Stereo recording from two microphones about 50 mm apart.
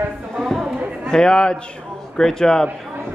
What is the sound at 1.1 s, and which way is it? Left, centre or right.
A man's voice, centre.